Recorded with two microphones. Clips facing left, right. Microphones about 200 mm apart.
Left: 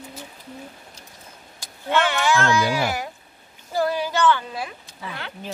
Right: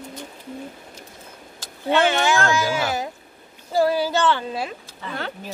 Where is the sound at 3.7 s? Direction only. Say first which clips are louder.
Right 3 dB; 30° right (ahead or behind).